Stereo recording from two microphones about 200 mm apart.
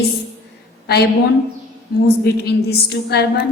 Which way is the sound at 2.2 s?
55° left (ahead or behind).